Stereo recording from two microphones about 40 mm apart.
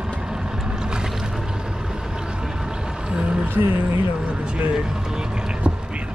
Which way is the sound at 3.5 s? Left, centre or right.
Right.